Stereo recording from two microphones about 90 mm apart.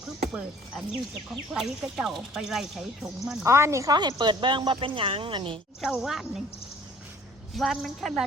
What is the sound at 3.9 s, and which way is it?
Speech, 50° right (ahead or behind).